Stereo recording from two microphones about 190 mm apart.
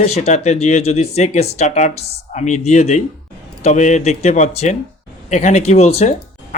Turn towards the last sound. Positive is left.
turn(degrees=35)  # may be behind; listen again after turning